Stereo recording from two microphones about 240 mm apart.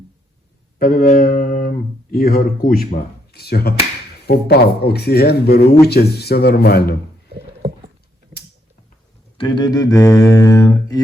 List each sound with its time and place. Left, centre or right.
0.8 s speech: left
9.4 s speech: centre